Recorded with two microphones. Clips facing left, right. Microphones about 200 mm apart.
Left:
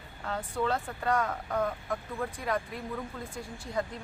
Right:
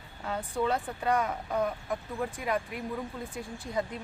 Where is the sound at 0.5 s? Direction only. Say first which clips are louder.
Right 1 dB; 15° right (ahead or behind).